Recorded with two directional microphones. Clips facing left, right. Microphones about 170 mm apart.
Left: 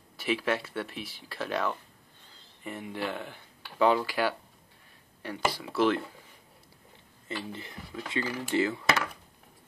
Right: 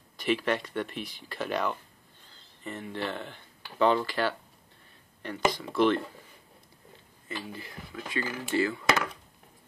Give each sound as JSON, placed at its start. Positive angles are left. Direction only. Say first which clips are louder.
{"t": 0.2, "sound": "speech", "louder": "right 1 dB", "side_deg": 5}
{"t": 7.2, "sound": "speech", "louder": "left 1 dB", "side_deg": 25}